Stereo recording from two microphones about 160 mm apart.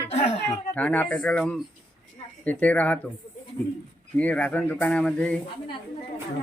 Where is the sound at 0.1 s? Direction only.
45° left (ahead or behind).